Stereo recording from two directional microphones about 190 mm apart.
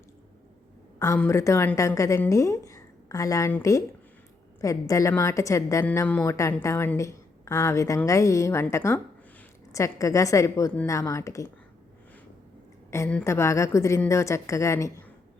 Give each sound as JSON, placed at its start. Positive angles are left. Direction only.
{"t": 0.9, "sound": "a woman's voice", "side_deg": 15}
{"t": 12.9, "sound": "a woman's voice", "side_deg": 10}